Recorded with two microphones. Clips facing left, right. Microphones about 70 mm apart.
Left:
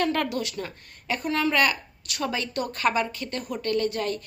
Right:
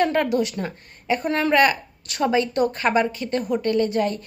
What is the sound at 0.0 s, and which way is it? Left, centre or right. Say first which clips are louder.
A woman's voice: right 6 dB; right.